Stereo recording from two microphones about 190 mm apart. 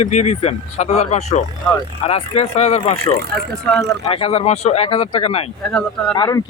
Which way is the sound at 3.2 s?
55° right (ahead or behind).